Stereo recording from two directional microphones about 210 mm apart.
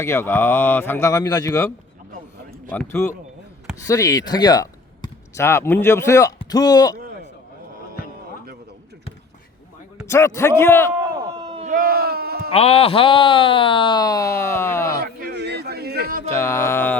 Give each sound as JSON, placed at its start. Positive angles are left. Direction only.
{"t": 0.0, "sound": "speech", "side_deg": 10}
{"t": 2.7, "sound": "speech", "side_deg": 10}
{"t": 10.1, "sound": "speech", "side_deg": 15}
{"t": 11.0, "sound": "a sound", "side_deg": -25}
{"t": 11.7, "sound": "sheep", "side_deg": -45}
{"t": 12.5, "sound": "speech", "side_deg": 30}
{"t": 15.0, "sound": "a sound", "side_deg": -50}
{"t": 16.3, "sound": "speech", "side_deg": 15}